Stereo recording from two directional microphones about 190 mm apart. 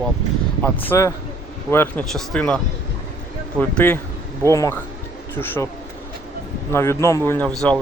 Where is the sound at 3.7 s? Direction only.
10° left (ahead or behind).